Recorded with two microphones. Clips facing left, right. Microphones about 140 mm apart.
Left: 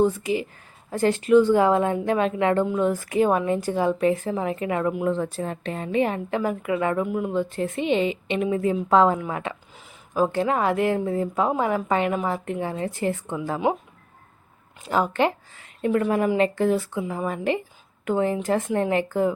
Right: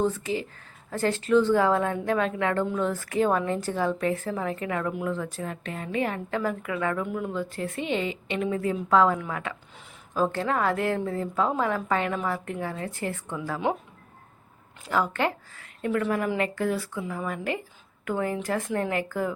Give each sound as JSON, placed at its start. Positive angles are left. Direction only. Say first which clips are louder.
{"t": 0.0, "sound": "a woman's voice", "louder": "left 5 dB", "side_deg": 15}
{"t": 14.8, "sound": "a woman's voice", "louder": "left 4 dB", "side_deg": 20}